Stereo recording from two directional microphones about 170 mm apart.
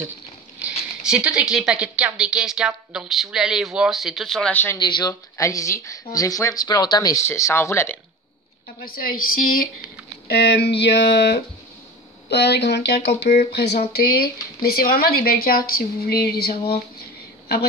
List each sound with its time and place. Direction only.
1.0 s a woman's voice: 5° right (ahead or behind); by 4.7 s 10° left (ahead or behind)
4.7 s speech: 25° left (ahead or behind)
8.8 s speech: 60° left (ahead or behind)
10.2 s speech: 70° left (ahead or behind)